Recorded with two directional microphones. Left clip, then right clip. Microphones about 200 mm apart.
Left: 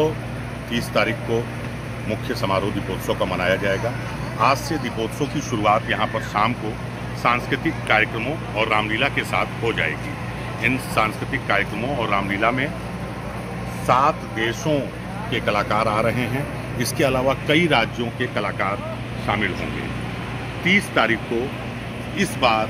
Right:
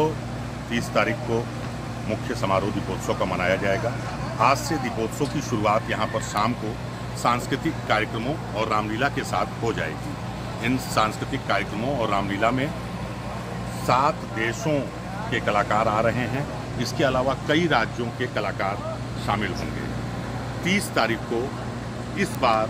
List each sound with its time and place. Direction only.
0.7 s speech: 10° right (ahead or behind)
3.1 s speech: 10° right (ahead or behind)
5.5 s speech: 45° right (ahead or behind); by 6.5 s 65° right (ahead or behind)
7.2 s speech: 85° right
8.5 s speech: 60° right (ahead or behind)
10.6 s speech: 60° right (ahead or behind); by 12.6 s 90° right
13.8 s speech: 40° right (ahead or behind)
14.7 s speech: 15° right (ahead or behind)
15.3 s speech: 5° left (ahead or behind)
16.7 s speech: 40° left (ahead or behind)
19.2 s speech: 20° left (ahead or behind)
20.6 s speech: 25° left (ahead or behind)
22.1 s speech: 45° left (ahead or behind)